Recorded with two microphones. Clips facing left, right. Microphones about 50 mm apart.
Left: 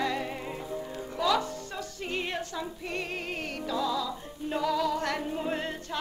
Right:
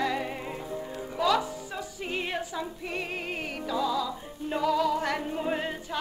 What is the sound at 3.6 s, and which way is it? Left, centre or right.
Music, centre.